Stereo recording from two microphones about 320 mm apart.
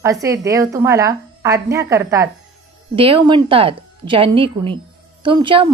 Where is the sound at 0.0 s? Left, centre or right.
Centre.